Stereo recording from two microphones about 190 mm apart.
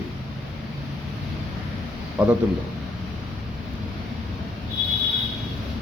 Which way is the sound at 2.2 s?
5° right (ahead or behind).